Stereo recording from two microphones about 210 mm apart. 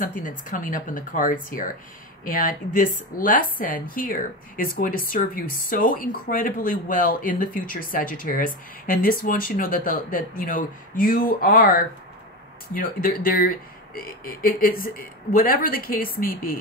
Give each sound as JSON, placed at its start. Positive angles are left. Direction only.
{"t": 0.0, "sound": "speech", "side_deg": 40}